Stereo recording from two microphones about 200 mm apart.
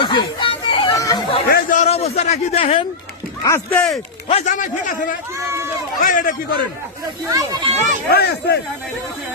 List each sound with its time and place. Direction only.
0.0 s chatter: 25° left (ahead or behind)
1.5 s a sound: 55° left (ahead or behind)
1.8 s a man's voice: 30° left (ahead or behind)
3.4 s speech: 10° left (ahead or behind)
4.3 s speech: 35° left (ahead or behind)
5.4 s run: 15° right (ahead or behind)
6.0 s speech: 40° left (ahead or behind)
7.3 s speech: 15° right (ahead or behind)
8.1 s speech: 55° left (ahead or behind)